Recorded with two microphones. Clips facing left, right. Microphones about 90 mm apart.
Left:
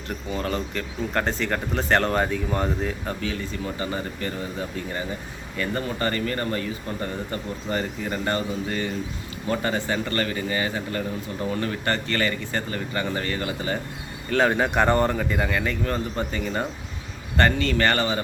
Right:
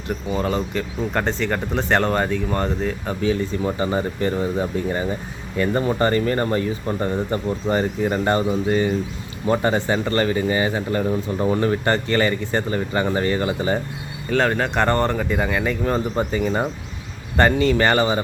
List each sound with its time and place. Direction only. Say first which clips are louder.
0.3 s speech: right 5 dB; 5° right (ahead or behind)
3.2 s speech: right 8 dB; 25° right (ahead or behind)
14.3 s speech: right 1 dB; 5° left (ahead or behind); by 18.2 s 15° right (ahead or behind)